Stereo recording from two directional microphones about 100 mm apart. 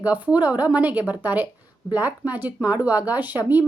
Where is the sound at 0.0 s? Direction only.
15° right (ahead or behind).